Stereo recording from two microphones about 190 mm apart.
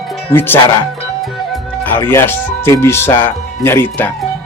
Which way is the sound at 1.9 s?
10° left (ahead or behind).